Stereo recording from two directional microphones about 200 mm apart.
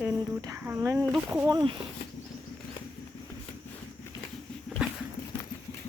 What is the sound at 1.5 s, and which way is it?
Speech, 20° right (ahead or behind).